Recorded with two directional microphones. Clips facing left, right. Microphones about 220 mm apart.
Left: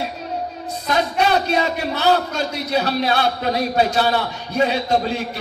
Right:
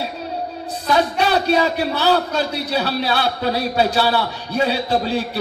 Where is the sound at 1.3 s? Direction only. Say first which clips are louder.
Right 2 dB; 35° right (ahead or behind).